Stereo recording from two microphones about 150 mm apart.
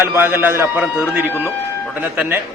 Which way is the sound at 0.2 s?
15° right (ahead or behind).